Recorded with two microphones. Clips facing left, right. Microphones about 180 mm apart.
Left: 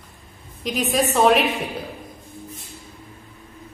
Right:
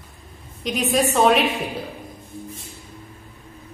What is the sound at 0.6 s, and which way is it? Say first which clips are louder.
Speech: right 1 dB; centre (ahead or behind).